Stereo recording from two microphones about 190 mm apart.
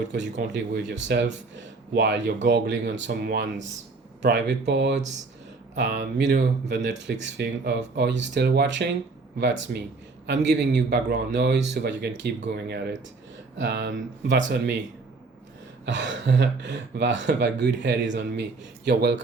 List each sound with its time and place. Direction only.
0.5 s a man's voice: 70° right (ahead or behind)
15.9 s speech: 70° right (ahead or behind)